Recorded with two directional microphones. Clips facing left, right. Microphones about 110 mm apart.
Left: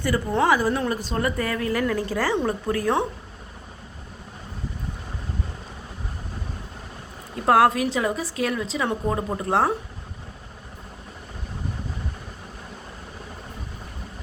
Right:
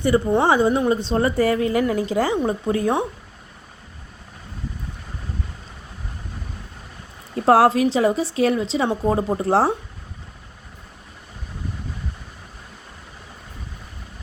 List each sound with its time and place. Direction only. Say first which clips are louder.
0.0 s speech: right 4 dB; 20° right (ahead or behind)
7.4 s speech: right 3 dB; 30° right (ahead or behind)